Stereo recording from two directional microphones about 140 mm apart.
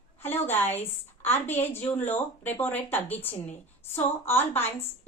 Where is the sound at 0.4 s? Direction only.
15° left (ahead or behind).